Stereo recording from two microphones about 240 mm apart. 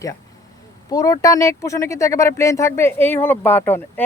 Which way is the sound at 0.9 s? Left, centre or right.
Centre.